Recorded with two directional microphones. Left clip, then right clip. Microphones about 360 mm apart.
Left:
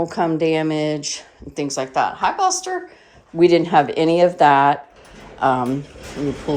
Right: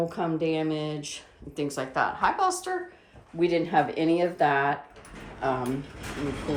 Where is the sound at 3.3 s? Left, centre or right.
Left.